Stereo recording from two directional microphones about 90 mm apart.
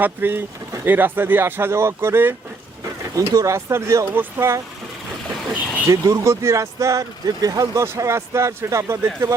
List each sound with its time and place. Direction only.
0.0 s speech: 25° right (ahead or behind)
5.9 s speech: 35° right (ahead or behind)